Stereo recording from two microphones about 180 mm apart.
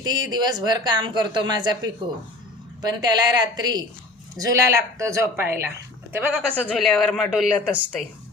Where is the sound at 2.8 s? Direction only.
20° right (ahead or behind).